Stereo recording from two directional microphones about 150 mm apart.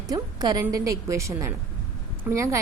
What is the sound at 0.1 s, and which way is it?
A woman's voice, 25° right (ahead or behind).